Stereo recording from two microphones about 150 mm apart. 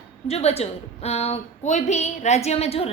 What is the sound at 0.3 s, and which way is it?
A woman's voice, 45° left (ahead or behind).